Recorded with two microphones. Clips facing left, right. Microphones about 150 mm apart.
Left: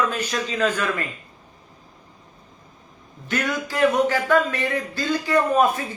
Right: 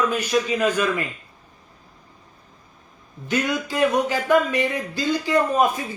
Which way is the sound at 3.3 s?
15° right (ahead or behind).